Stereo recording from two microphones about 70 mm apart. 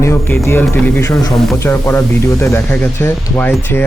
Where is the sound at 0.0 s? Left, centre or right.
Left.